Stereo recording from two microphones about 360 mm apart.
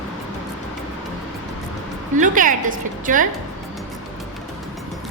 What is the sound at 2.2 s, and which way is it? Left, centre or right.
A woman's voice, right.